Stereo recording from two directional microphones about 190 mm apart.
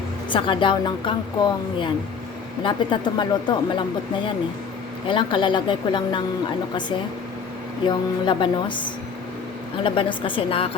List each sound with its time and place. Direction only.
0.3 s speech: 25° left (ahead or behind)
5.0 s speech: 25° left (ahead or behind)
7.9 s speech: 25° left (ahead or behind)
9.8 s speech: 25° left (ahead or behind)